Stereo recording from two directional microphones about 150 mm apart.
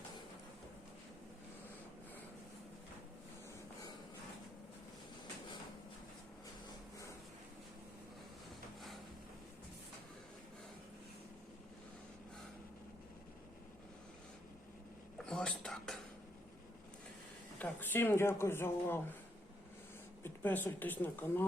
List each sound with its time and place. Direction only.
15.3 s speech: 5° left (ahead or behind)
17.6 s speech: 15° left (ahead or behind)
20.2 s speech: 15° left (ahead or behind)